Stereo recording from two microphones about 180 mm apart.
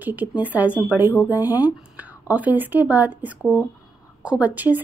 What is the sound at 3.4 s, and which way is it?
A woman's voice, 5° left (ahead or behind).